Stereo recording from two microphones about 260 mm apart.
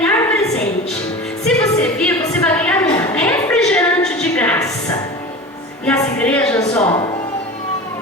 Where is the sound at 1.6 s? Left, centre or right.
Centre.